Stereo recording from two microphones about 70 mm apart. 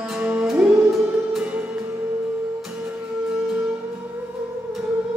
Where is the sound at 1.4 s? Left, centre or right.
Right.